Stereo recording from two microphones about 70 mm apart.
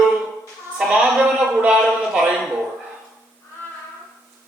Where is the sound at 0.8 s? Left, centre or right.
Centre.